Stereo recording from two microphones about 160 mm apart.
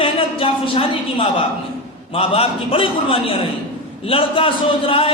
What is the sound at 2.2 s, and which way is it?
A man's voice, 35° left (ahead or behind).